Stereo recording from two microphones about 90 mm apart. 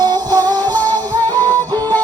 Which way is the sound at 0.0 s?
50° right (ahead or behind).